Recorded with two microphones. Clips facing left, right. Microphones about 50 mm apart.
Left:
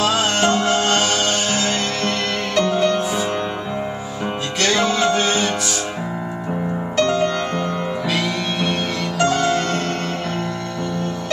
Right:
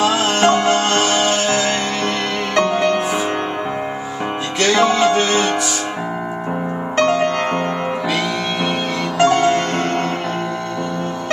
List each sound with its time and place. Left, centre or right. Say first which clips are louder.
0.0 s music: right 3 dB; centre
4.7 s music: right 4 dB; centre
7.0 s music: right 2 dB; right
9.2 s music: right 4 dB; right